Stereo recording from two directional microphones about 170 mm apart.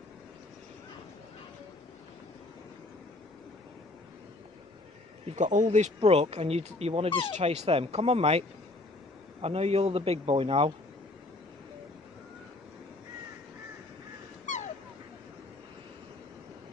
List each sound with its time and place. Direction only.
5.2 s speech: 45° right (ahead or behind)
5.9 s a man's voice: 30° right (ahead or behind)
14.4 s dog: 45° left (ahead or behind)